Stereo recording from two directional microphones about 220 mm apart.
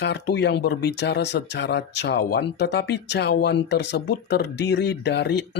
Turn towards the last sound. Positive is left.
turn(degrees=50)  # may be behind; listen again after turning